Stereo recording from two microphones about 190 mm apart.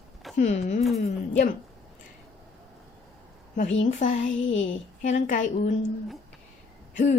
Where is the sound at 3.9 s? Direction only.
40° left (ahead or behind).